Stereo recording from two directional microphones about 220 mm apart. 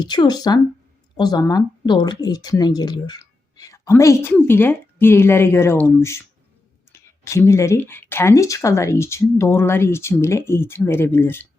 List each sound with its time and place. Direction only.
0.0 s speech: 20° left (ahead or behind)